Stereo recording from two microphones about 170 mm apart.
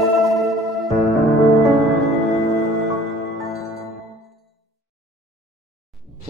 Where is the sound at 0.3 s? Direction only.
Centre (ahead or behind).